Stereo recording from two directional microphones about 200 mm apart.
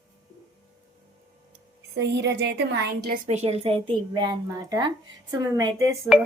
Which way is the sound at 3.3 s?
30° right (ahead or behind).